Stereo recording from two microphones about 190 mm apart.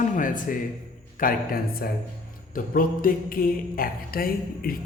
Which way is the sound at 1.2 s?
45° left (ahead or behind).